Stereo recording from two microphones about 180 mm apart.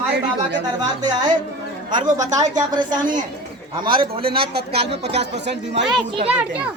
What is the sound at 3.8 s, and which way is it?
A woman's voice, 25° right (ahead or behind).